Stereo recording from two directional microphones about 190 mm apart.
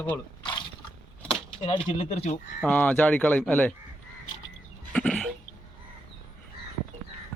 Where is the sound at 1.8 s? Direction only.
35° left (ahead or behind).